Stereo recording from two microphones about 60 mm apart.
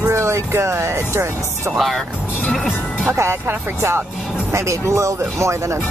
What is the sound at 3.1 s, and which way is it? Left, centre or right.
Speech, right.